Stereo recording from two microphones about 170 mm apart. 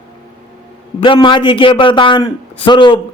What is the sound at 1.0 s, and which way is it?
Speech, 30° left (ahead or behind).